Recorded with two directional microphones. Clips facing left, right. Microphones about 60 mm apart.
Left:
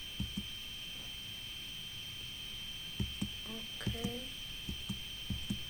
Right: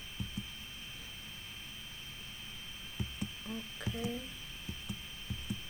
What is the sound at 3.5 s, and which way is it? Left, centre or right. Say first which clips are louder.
Speech: right 2 dB; centre.